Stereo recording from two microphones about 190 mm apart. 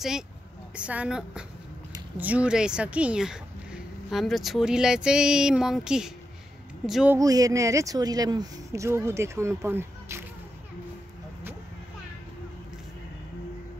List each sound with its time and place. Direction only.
0.7 s speech: 5° right (ahead or behind)
7.2 s speech: 20° right (ahead or behind)